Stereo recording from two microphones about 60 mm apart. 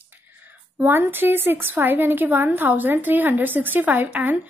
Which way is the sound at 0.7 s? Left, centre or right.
Right.